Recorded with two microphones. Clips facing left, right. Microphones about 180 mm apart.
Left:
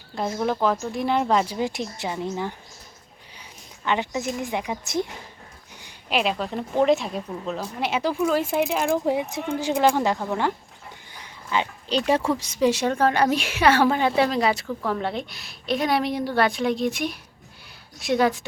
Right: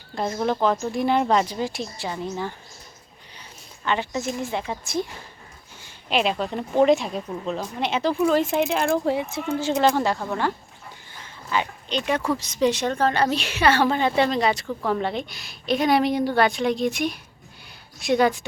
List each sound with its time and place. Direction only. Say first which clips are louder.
0.2 s a woman's voice: right 1 dB; 5° left (ahead or behind)
1.5 s a woman's voice: left 1 dB; 20° left (ahead or behind)
3.8 s a woman's voice: even; 15° left (ahead or behind)
6.1 s a woman's voice: right 1 dB; 5° left (ahead or behind)
11.1 s a sound: even; 20° left (ahead or behind)
11.9 s speech: left 5 dB; 35° left (ahead or behind)
12.4 s a woman's voice: left 1 dB; 10° left (ahead or behind)